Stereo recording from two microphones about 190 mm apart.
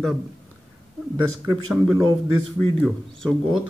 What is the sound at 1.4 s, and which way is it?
Speech, centre (ahead or behind).